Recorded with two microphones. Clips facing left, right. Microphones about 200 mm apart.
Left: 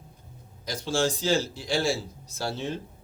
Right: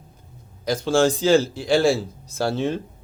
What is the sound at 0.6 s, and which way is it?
A man's voice, 55° right (ahead or behind).